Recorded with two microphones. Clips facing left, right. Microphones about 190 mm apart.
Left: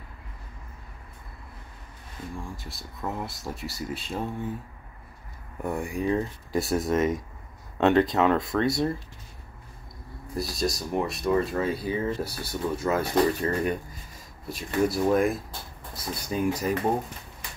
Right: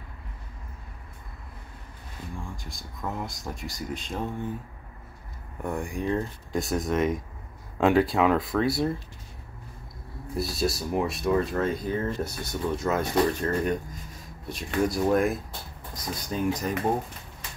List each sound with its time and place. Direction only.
2.3 s speech: centre (ahead or behind)
5.6 s speech: 5° left (ahead or behind)
10.3 s speech: centre (ahead or behind)
12.3 s speech: 30° left (ahead or behind)
12.8 s speech: centre (ahead or behind)